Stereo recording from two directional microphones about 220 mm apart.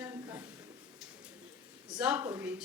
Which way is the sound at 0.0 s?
10° right (ahead or behind).